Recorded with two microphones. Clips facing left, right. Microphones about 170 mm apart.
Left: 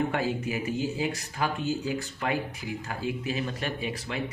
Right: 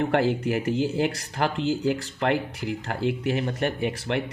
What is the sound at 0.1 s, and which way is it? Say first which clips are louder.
Speech: right 6 dB; 70° right (ahead or behind).